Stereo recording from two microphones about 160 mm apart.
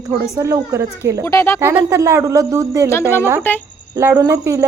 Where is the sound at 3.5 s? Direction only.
15° left (ahead or behind).